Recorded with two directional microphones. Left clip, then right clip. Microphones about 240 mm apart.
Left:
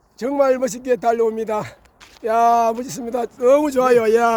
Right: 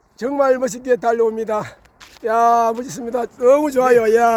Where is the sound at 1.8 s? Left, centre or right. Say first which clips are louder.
Right 2 dB; right.